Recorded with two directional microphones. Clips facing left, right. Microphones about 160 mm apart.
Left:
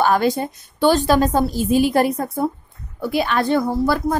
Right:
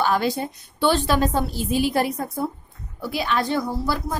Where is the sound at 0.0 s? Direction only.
50° left (ahead or behind).